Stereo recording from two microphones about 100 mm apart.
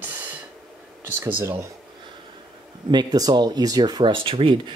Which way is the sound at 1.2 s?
20° right (ahead or behind).